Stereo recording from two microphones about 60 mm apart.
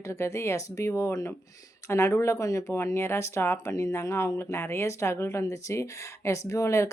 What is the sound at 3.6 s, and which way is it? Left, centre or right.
Speech, left.